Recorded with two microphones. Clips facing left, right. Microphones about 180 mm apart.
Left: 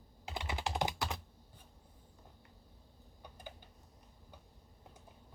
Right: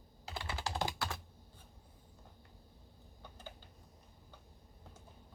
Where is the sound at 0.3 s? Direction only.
20° left (ahead or behind).